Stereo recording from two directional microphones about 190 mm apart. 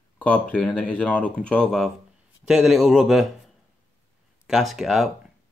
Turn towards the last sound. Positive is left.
turn(degrees=0)  # may be behind; listen again after turning